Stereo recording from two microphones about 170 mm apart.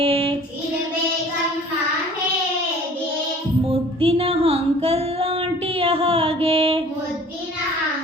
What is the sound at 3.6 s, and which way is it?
Child singing, 35° right (ahead or behind).